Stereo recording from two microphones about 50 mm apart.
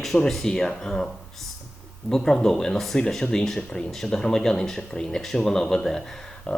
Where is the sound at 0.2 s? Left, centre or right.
Centre.